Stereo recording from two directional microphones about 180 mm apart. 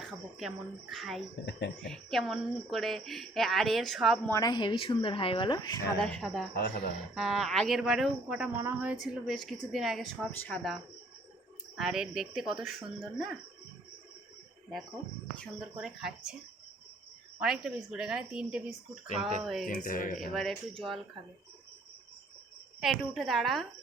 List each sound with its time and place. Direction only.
0.0 s speech: centre (ahead or behind)
1.5 s speech: 75° left (ahead or behind)
1.9 s speech: centre (ahead or behind)
4.3 s speech: 20° left (ahead or behind)
6.0 s speech: 5° left (ahead or behind)
6.5 s speech: 65° left (ahead or behind)
7.1 s speech: centre (ahead or behind)
11.8 s speech: centre (ahead or behind)
15.8 s speech: 5° right (ahead or behind)
17.4 s speech: centre (ahead or behind)
19.6 s speech: 50° left (ahead or behind)
20.3 s speech: centre (ahead or behind)
22.8 s speech: centre (ahead or behind)